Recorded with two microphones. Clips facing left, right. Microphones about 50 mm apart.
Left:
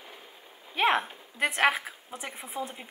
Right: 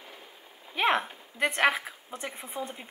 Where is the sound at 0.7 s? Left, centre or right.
Centre.